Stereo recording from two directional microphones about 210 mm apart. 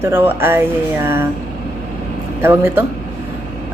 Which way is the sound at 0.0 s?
10° right (ahead or behind).